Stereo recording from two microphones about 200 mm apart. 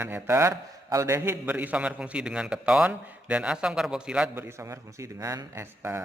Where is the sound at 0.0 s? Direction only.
10° right (ahead or behind).